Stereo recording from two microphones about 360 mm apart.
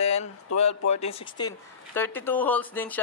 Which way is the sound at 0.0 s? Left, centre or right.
Centre.